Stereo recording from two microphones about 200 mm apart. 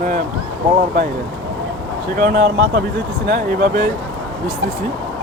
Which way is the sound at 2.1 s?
45° right (ahead or behind).